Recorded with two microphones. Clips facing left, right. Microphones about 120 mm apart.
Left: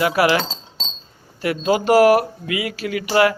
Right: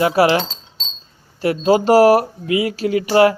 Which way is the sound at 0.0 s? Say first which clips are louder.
Right 3 dB; 30° right (ahead or behind).